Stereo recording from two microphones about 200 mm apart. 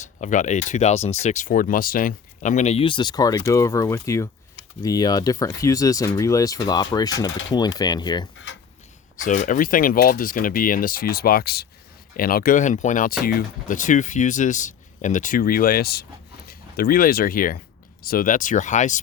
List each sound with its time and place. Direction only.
0.2 s speech: 40° left (ahead or behind); by 7.1 s 20° left (ahead or behind)
7.3 s speech: 65° left (ahead or behind)
7.5 s speech: 20° left (ahead or behind)
9.2 s speech: 40° left (ahead or behind)